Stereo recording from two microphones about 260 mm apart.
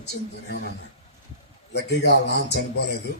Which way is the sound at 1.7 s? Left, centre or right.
Left.